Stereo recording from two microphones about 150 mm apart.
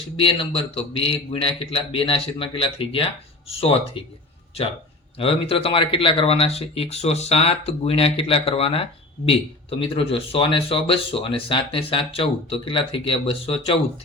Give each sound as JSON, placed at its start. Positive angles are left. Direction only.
{"t": 0.2, "sound": "speech", "side_deg": 35}
{"t": 5.1, "sound": "speech", "side_deg": 40}